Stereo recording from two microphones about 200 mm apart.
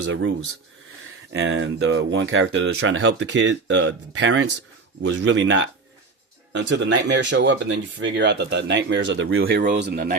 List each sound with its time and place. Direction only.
0.0 s speech: 75° right (ahead or behind)
9.7 s speech: 55° right (ahead or behind)